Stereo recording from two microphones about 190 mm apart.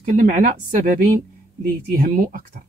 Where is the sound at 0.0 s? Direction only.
40° right (ahead or behind).